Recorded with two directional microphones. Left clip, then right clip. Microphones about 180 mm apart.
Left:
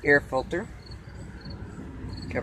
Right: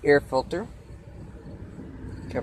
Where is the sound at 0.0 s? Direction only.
20° right (ahead or behind).